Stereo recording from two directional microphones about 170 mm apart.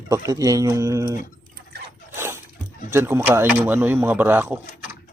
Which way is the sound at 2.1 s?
15° right (ahead or behind).